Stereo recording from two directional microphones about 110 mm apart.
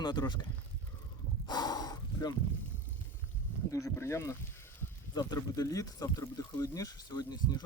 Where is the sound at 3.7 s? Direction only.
30° left (ahead or behind).